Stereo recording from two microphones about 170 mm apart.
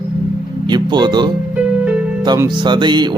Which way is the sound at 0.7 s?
25° right (ahead or behind).